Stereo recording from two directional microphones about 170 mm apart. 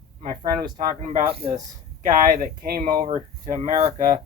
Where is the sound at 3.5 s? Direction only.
45° right (ahead or behind).